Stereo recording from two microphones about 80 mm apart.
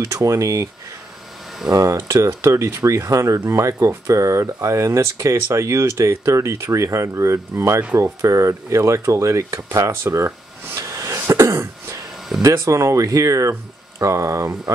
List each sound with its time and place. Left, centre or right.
0.0 s speech: right
1.7 s speech: right